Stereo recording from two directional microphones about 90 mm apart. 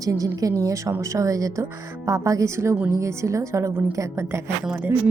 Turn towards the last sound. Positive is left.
turn(degrees=-25)  # may be behind; listen again after turning